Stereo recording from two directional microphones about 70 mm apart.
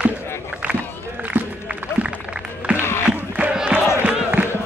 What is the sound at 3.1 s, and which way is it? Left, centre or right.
Crowd, right.